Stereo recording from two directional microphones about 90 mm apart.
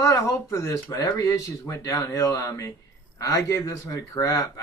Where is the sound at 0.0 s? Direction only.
40° left (ahead or behind).